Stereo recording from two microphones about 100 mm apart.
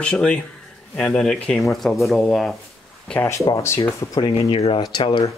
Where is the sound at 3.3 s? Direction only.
30° left (ahead or behind).